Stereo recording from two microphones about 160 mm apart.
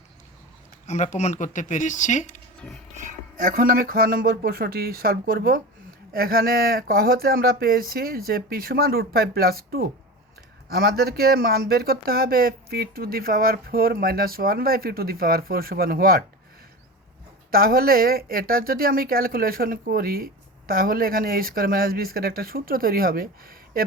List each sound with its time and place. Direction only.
0.9 s speech: 50° left (ahead or behind)
2.9 s speech: 50° right (ahead or behind); by 16.2 s 70° right (ahead or behind)
17.5 s speech: 70° right (ahead or behind)